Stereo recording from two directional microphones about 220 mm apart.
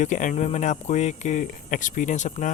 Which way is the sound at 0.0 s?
35° left (ahead or behind).